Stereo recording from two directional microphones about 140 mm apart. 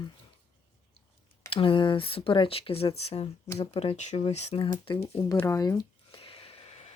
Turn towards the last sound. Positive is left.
turn(degrees=40)  # may be behind; listen again after turning